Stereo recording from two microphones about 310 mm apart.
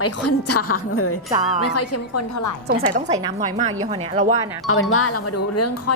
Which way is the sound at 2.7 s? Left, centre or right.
Right.